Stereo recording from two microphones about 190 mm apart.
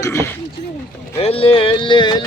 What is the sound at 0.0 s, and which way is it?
Speech, 15° left (ahead or behind).